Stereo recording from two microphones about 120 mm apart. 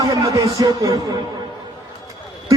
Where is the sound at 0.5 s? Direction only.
30° right (ahead or behind).